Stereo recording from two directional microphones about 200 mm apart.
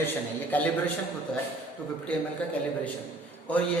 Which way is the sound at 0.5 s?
10° left (ahead or behind).